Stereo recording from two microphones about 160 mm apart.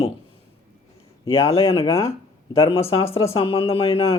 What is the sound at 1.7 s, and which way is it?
Speech, 35° left (ahead or behind).